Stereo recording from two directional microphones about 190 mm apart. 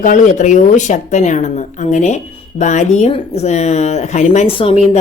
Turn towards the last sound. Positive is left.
turn(degrees=30)  # may be behind; listen again after turning